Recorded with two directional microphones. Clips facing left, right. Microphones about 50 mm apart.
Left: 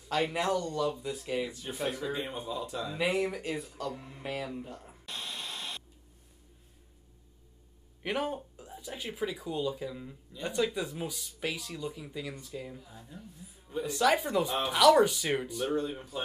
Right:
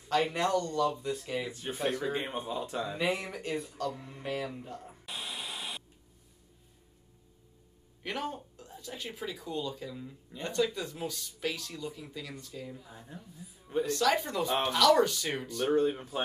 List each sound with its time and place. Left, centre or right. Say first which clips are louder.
0.2 s speech: right 1 dB; centre
1.5 s speech: right 2 dB; right
1.8 s speech: right 2 dB; centre
2.1 s speech: right 1 dB; right
3.0 s speech: left 5 dB; centre
8.0 s speech: left 3 dB; centre
13.8 s speech: left 3 dB; centre
15.7 s speech: right 5 dB; right